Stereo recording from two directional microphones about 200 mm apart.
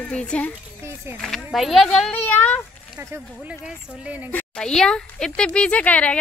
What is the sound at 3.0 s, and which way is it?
Speech, 10° right (ahead or behind).